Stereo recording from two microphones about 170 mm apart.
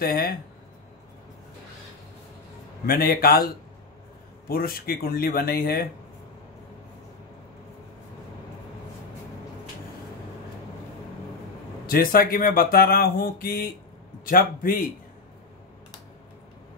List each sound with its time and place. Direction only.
0.0 s speech: 60° left (ahead or behind)
2.9 s speech: 60° left (ahead or behind)
4.5 s speech: 60° left (ahead or behind)
11.9 s speech: 60° left (ahead or behind)